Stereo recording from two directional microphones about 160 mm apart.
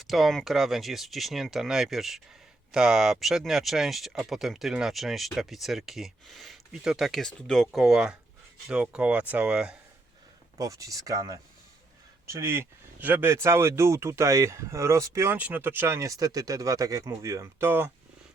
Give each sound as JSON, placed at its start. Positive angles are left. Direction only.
{"t": 0.0, "sound": "speech", "side_deg": 0}
{"t": 10.6, "sound": "speech", "side_deg": -20}